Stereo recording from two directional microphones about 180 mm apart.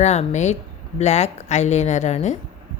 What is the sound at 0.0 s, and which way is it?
Speech, 40° left (ahead or behind).